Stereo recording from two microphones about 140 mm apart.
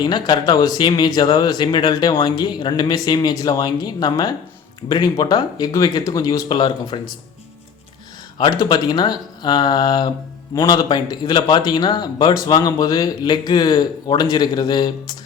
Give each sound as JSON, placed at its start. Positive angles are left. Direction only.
{"t": 0.0, "sound": "speech", "side_deg": 30}
{"t": 8.4, "sound": "speech", "side_deg": 30}